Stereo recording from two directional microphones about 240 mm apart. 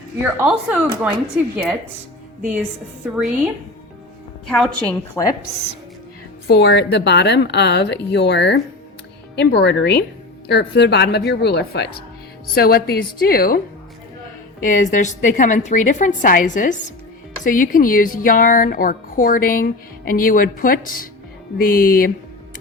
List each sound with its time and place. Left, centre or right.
0.2 s speech: centre
2.4 s a woman's voice: centre
6.5 s a woman's voice: left
14.6 s a woman's voice: left